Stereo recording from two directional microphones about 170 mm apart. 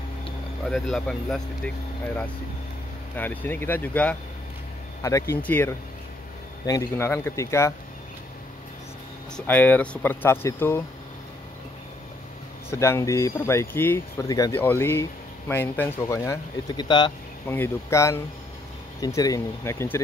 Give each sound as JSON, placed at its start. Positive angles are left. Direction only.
{"t": 0.7, "sound": "speech", "side_deg": 0}
{"t": 3.2, "sound": "speech", "side_deg": 10}
{"t": 9.5, "sound": "speech", "side_deg": 10}
{"t": 12.6, "sound": "speech", "side_deg": 15}
{"t": 17.5, "sound": "speech", "side_deg": 15}